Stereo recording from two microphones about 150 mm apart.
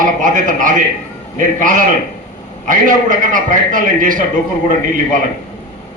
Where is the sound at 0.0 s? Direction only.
60° right (ahead or behind).